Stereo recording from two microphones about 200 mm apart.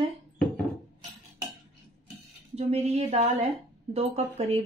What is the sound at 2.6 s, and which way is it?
Speech, 35° right (ahead or behind).